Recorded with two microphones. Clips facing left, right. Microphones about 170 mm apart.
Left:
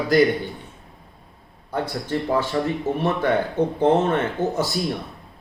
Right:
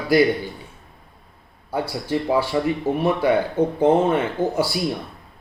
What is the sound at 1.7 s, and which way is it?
Speech, 10° right (ahead or behind).